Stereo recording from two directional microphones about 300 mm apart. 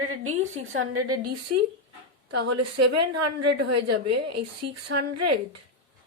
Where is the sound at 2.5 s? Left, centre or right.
Right.